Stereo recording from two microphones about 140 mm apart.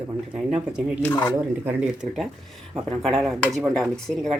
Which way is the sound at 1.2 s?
5° right (ahead or behind).